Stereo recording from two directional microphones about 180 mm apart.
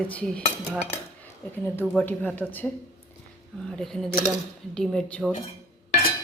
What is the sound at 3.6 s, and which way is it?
A woman's voice, 5° left (ahead or behind).